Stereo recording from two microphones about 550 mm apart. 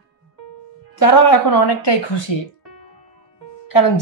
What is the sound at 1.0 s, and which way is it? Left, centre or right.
Speech, left.